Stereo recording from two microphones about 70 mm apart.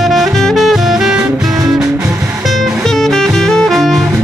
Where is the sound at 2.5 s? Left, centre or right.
Centre.